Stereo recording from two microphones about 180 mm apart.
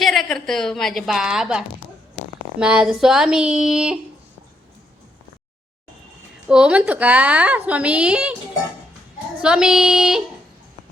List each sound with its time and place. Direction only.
0.0 s a woman's voice: centre (ahead or behind)
6.5 s a woman's voice: 5° right (ahead or behind)
9.4 s speech: 5° right (ahead or behind)